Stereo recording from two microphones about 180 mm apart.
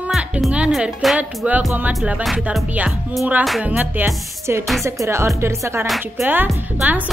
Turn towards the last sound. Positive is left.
turn(degrees=-5)  # may be behind; listen again after turning